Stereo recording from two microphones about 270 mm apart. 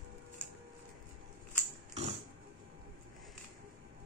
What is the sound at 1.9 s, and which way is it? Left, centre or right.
Pig, right.